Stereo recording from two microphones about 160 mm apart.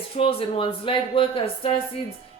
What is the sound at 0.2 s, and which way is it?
A woman's voice, 35° left (ahead or behind).